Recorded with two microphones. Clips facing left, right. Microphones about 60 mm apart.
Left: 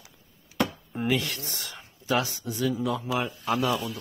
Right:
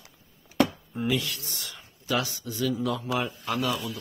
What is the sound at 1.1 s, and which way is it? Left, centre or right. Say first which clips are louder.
Speech: left 1 dB; left.